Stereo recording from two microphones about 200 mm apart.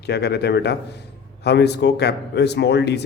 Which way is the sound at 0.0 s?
55° left (ahead or behind).